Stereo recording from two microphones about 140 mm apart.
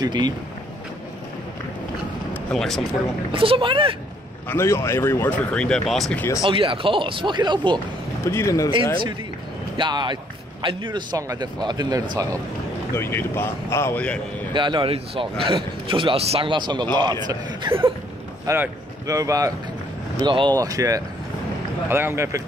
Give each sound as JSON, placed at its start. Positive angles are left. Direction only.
{"t": 0.0, "sound": "a man's voice", "side_deg": -30}
{"t": 2.5, "sound": "speech", "side_deg": 5}
{"t": 3.3, "sound": "a man's voice", "side_deg": -40}
{"t": 4.5, "sound": "speech", "side_deg": 20}
{"t": 6.4, "sound": "a man's voice", "side_deg": -40}
{"t": 8.3, "sound": "speech", "side_deg": 20}
{"t": 9.8, "sound": "a man's voice", "side_deg": -35}
{"t": 12.9, "sound": "speech", "side_deg": 15}
{"t": 14.5, "sound": "a man's voice", "side_deg": -35}
{"t": 18.5, "sound": "speech", "side_deg": -20}